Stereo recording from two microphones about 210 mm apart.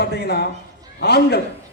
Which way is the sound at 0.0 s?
50° left (ahead or behind).